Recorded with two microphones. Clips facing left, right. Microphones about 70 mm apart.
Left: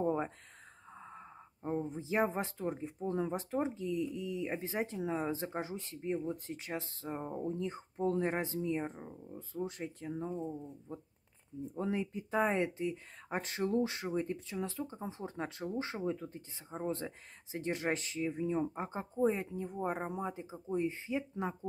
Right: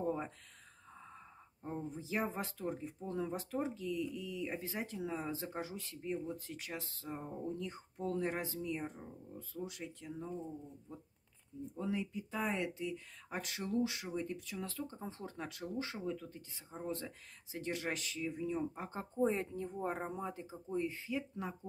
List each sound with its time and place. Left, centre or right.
0.0 s a sound: left
0.9 s speech: left
14.9 s speech: centre
19.1 s speech: centre; by 21.5 s left